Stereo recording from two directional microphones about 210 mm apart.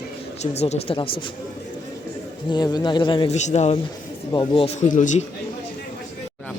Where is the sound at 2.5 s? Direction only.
20° left (ahead or behind).